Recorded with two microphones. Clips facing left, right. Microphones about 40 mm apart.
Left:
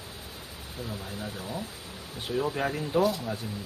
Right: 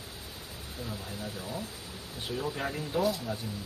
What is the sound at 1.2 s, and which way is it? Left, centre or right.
Speech, left.